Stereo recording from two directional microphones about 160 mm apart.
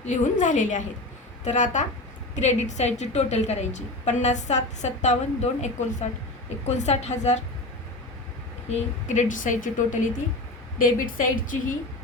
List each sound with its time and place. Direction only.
0.0 s a woman's voice: 50° left (ahead or behind)
8.7 s a woman's voice: 50° left (ahead or behind)